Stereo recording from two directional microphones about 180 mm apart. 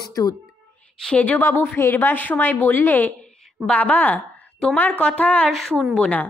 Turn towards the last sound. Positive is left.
turn(degrees=5)  # may be behind; listen again after turning